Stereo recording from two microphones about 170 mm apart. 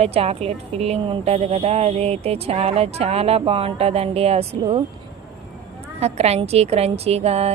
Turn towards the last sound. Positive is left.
turn(degrees=-40)  # may be behind; listen again after turning